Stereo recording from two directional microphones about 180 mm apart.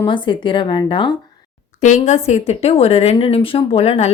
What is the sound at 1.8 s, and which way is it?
Speech, 40° left (ahead or behind).